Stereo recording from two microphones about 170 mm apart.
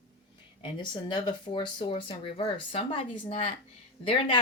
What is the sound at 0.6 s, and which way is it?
Speech, 25° left (ahead or behind).